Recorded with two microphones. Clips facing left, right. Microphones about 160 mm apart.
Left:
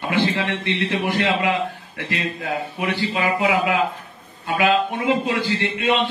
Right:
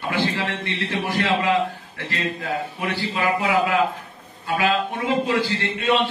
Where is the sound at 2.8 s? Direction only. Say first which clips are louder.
Left 3 dB; 20° left (ahead or behind).